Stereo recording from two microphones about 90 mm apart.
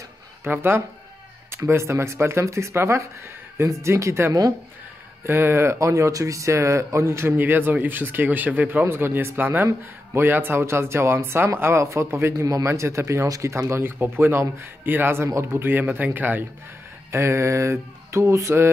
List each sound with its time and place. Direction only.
0.4 s speech: 25° right (ahead or behind)
4.3 s speech: 45° right (ahead or behind)
5.2 s speech: 30° right (ahead or behind)
17.1 s speech: 30° right (ahead or behind)